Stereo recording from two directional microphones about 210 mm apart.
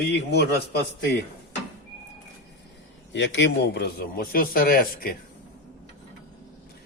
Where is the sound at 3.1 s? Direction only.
60° left (ahead or behind).